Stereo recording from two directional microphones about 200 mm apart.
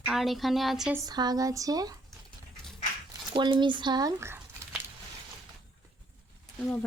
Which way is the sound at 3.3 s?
25° right (ahead or behind).